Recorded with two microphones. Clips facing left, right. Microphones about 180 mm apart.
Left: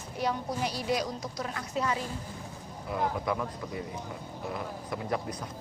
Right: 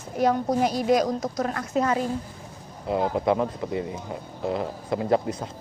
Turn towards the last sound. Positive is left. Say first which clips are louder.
# right 9 dB
turn(degrees=-25)  # may be behind; listen again after turning